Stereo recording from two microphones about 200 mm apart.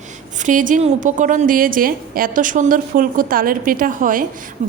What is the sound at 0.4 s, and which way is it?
A woman's voice, 40° right (ahead or behind).